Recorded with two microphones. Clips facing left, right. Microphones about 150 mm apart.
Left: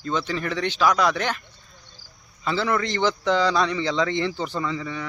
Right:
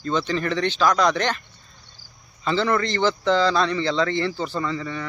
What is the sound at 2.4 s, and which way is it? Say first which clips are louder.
A man's voice: right 2 dB; 5° left (ahead or behind).